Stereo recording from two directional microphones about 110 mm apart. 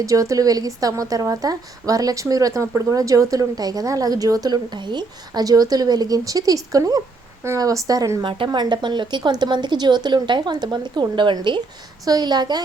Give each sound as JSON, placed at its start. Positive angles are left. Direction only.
{"t": 0.0, "sound": "a woman's voice", "side_deg": -30}
{"t": 8.2, "sound": "a woman's voice", "side_deg": -50}